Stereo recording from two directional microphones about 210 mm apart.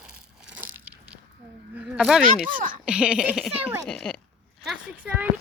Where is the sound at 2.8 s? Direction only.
5° right (ahead or behind).